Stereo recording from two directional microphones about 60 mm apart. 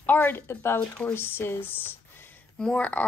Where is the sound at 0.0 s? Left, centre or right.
Left.